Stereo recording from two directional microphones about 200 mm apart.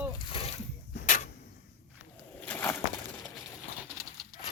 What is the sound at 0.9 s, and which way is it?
Tick-tock, 40° left (ahead or behind).